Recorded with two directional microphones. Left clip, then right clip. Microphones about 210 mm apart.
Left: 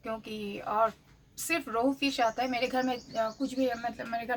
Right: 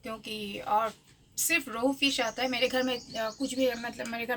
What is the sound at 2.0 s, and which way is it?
A woman's voice, 5° left (ahead or behind).